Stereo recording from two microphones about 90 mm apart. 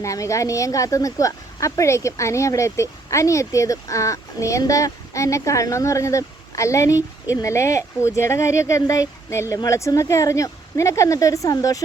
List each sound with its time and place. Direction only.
0.0 s speech: 35° left (ahead or behind)